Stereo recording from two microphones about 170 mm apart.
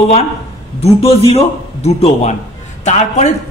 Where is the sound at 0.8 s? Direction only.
35° left (ahead or behind).